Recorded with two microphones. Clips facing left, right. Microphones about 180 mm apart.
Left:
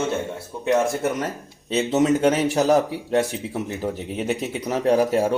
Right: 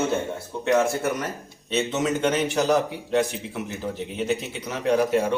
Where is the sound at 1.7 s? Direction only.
35° left (ahead or behind).